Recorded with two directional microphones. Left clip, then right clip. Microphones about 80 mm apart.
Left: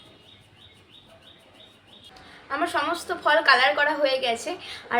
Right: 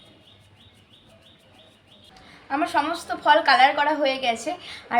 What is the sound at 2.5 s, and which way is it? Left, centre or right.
A woman's voice, left.